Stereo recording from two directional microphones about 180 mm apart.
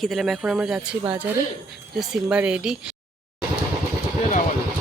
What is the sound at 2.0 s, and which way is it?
Speech, 5° right (ahead or behind).